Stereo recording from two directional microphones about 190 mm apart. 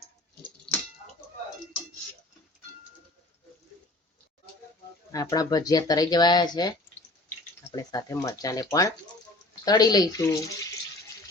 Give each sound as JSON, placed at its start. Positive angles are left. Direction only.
{"t": 0.7, "sound": "tick-tock", "side_deg": 5}
{"t": 5.1, "sound": "speech", "side_deg": 20}
{"t": 7.8, "sound": "speech", "side_deg": 20}